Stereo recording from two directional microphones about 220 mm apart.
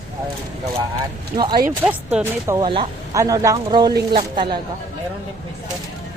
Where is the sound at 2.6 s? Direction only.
20° right (ahead or behind).